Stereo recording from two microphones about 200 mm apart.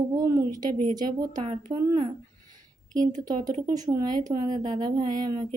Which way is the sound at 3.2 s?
20° right (ahead or behind).